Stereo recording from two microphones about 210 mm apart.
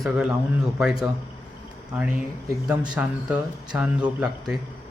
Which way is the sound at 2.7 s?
5° right (ahead or behind).